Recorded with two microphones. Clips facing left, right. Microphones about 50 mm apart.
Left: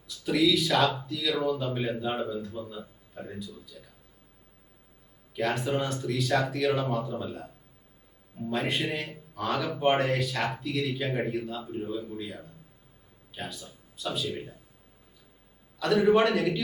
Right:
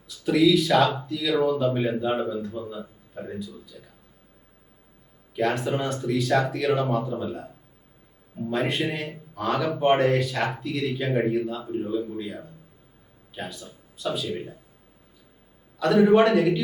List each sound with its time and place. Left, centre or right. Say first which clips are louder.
0.1 s a man's voice: right 5 dB; centre
5.3 s a man's voice: right 3 dB; centre
15.8 s a man's voice: right 4 dB; centre